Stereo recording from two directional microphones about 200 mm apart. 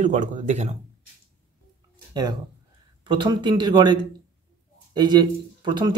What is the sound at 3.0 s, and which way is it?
Speech, 25° right (ahead or behind).